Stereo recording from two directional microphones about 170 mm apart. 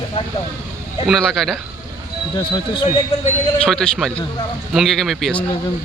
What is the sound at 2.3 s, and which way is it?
Speech, 25° left (ahead or behind).